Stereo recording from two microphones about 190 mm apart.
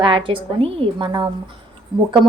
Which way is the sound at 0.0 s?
25° right (ahead or behind).